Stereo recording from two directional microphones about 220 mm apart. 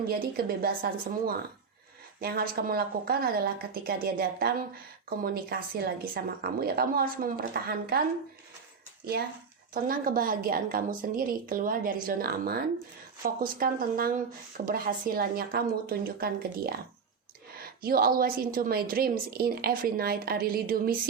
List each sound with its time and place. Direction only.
0.1 s speech: 45° right (ahead or behind)
9.9 s a woman's voice: 40° right (ahead or behind)